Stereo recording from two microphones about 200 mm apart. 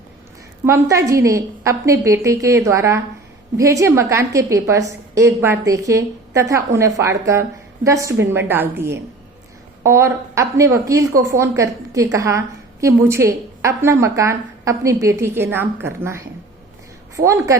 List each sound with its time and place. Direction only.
0.6 s a woman's voice: 15° right (ahead or behind)